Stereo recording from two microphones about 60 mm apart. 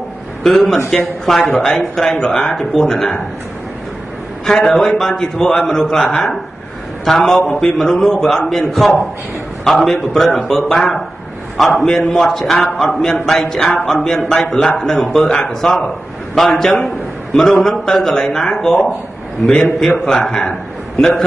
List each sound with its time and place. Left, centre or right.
0.4 s a man's voice: centre
1.4 s speech: centre
1.7 s a man's voice: centre
4.5 s a man's voice: centre
7.1 s a man's voice: centre
13.7 s speech: centre
14.0 s a man's voice: centre